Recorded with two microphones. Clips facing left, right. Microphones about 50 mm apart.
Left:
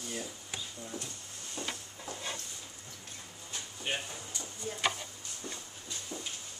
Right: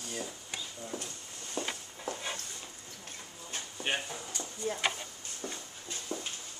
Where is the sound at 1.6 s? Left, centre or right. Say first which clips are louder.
Right 3 dB; right.